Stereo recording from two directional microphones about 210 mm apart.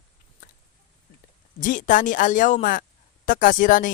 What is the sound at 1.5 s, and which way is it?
Speech, 40° left (ahead or behind).